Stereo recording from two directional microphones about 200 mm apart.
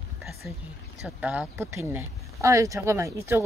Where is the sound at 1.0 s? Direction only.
5° right (ahead or behind).